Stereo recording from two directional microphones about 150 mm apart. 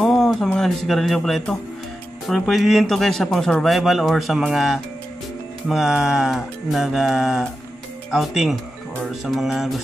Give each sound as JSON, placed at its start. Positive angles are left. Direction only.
{"t": 0.0, "sound": "a man's voice", "side_deg": 0}